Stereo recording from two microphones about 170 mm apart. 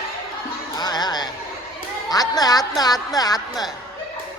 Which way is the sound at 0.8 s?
25° left (ahead or behind).